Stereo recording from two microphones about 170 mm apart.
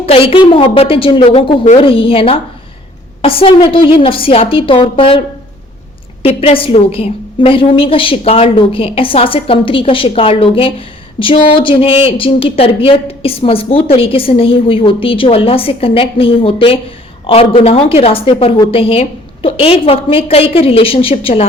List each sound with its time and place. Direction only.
0.0 s a woman's voice: 35° left (ahead or behind)
6.2 s a woman's voice: 35° left (ahead or behind)